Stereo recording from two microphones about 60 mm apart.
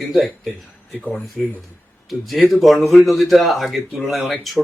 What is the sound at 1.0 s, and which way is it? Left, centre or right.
Speech, left.